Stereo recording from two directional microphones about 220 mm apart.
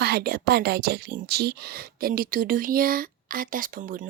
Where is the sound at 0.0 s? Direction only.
45° right (ahead or behind).